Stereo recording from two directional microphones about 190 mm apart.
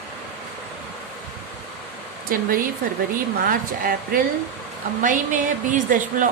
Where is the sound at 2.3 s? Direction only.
50° right (ahead or behind).